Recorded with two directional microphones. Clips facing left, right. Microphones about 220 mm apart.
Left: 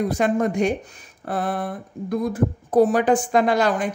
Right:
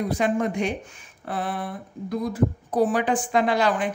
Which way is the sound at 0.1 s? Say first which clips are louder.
Left 3 dB; 45° left (ahead or behind).